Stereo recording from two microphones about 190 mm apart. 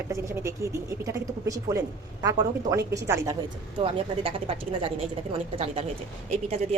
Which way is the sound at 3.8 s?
30° right (ahead or behind).